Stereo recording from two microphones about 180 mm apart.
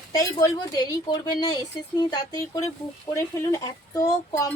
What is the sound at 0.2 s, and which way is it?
A woman's voice, 20° left (ahead or behind).